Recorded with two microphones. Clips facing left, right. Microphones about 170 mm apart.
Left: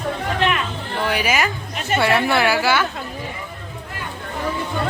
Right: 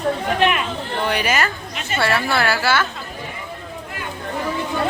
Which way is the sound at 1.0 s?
5° left (ahead or behind).